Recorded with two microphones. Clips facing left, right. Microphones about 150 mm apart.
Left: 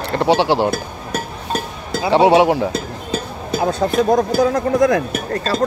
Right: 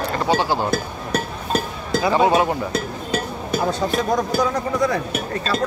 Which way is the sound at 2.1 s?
80° left.